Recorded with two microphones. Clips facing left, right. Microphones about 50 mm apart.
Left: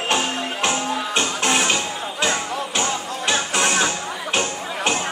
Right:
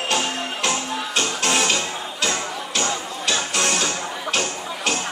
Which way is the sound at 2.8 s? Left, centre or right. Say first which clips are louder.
Right 1 dB; left.